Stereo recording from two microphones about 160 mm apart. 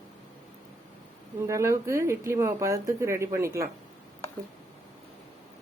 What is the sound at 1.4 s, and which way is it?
Speech, 20° right (ahead or behind).